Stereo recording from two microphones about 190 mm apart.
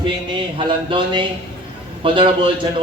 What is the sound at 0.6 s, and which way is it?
Speech, 25° right (ahead or behind).